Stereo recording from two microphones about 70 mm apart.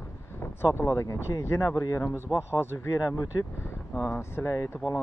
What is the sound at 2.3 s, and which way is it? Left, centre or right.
Speech, right.